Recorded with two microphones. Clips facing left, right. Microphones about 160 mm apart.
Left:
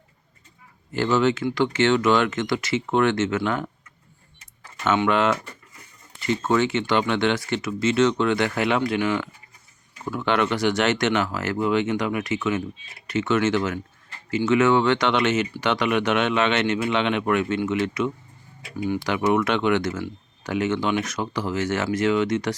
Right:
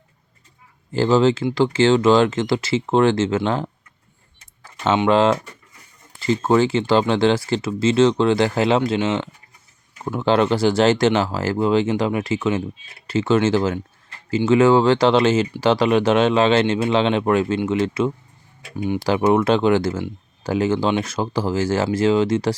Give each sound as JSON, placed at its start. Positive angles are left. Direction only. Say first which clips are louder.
{"t": 0.9, "sound": "speech", "louder": "right 5 dB", "side_deg": -30}
{"t": 4.8, "sound": "speech", "louder": "right 4 dB", "side_deg": -30}
{"t": 6.4, "sound": "speech", "louder": "right 5 dB", "side_deg": -30}